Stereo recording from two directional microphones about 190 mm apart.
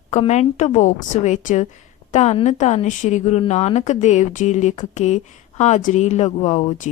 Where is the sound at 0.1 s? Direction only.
35° left (ahead or behind).